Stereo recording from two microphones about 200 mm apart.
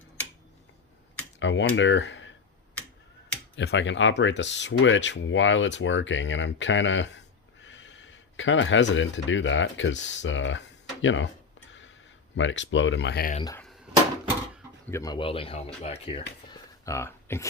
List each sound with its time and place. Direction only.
1.4 s speech: 65° left (ahead or behind)
3.5 s speech: 60° left (ahead or behind)
12.4 s speech: 70° left (ahead or behind)
14.8 s speech: 15° left (ahead or behind)
16.5 s a sound: 15° left (ahead or behind)